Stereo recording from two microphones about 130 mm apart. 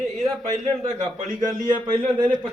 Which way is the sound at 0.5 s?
65° right (ahead or behind).